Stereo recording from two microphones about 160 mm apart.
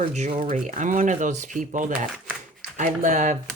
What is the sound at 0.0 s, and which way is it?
Speech, 45° right (ahead or behind).